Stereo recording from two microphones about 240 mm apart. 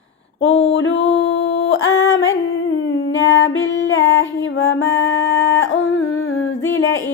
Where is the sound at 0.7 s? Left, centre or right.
Left.